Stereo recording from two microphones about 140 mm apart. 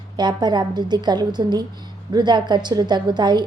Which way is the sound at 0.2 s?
30° right (ahead or behind).